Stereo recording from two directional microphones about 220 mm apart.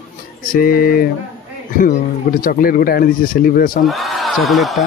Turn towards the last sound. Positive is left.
turn(degrees=0)  # may be behind; listen again after turning